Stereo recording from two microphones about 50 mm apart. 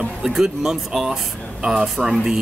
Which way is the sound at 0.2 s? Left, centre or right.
Centre.